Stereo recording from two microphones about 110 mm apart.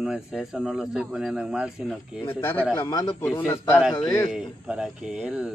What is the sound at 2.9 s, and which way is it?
Speech, 35° left (ahead or behind).